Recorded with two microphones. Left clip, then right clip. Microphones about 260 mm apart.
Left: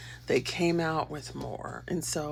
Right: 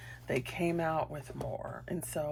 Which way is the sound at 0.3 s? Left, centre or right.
Centre.